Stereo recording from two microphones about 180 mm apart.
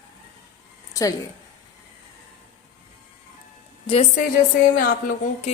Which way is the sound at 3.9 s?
35° left (ahead or behind).